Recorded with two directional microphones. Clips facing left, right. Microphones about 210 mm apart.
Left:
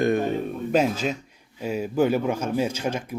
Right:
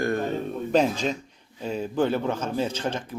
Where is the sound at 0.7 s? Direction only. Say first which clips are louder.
Even; 5° left (ahead or behind).